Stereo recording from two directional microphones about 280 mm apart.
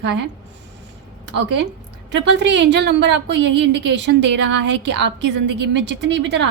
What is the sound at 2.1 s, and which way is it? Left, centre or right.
A woman's voice, right.